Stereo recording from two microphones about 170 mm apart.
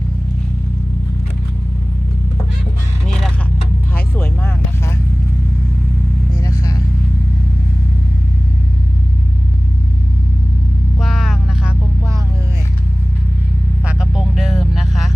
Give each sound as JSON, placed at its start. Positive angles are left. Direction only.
{"t": 3.9, "sound": "vehicle", "side_deg": 10}
{"t": 6.4, "sound": "vehicle", "side_deg": 20}
{"t": 11.0, "sound": "vehicle", "side_deg": 0}
{"t": 13.8, "sound": "vehicle", "side_deg": -5}